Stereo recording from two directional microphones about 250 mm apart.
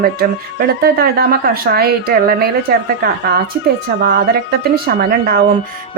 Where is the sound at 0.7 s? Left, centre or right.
Right.